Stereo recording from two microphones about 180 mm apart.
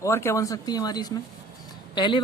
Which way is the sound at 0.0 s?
15° left (ahead or behind).